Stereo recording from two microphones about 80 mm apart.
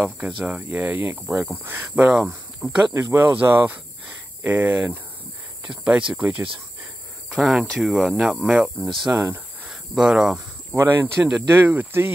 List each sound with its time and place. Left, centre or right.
0.5 s speech: centre
2.1 s speech: centre
2.9 s speech: right
3.3 s speech: right; by 10.4 s centre
10.7 s speech: right
11.1 s speech: centre
11.5 s speech: right